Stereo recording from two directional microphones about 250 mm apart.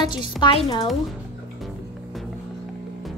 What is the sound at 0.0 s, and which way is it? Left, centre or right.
Speech, centre.